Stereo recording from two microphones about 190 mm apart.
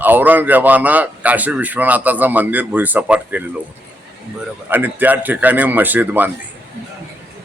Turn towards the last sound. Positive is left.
turn(degrees=-10)  # may be behind; listen again after turning